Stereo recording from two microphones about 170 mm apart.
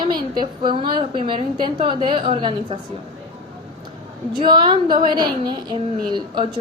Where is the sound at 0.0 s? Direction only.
25° right (ahead or behind).